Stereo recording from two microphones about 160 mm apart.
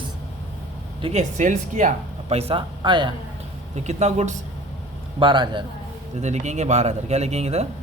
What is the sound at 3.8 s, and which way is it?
Speech, 45° right (ahead or behind).